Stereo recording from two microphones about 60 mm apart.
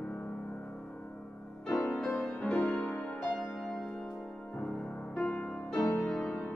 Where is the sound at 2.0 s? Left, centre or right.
Centre.